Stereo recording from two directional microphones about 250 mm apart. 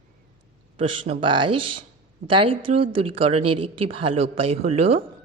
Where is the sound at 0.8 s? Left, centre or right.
Right.